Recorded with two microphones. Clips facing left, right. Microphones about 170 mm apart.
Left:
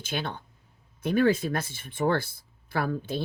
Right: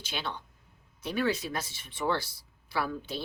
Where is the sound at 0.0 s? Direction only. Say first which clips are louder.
Left 4 dB; 50° left (ahead or behind).